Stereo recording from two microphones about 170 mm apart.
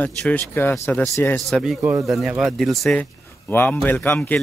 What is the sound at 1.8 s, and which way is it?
Speech, 15° right (ahead or behind).